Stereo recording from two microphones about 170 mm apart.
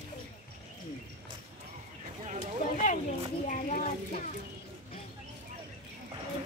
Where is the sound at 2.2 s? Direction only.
45° right (ahead or behind).